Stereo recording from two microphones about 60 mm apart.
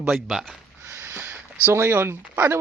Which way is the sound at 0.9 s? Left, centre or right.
Right.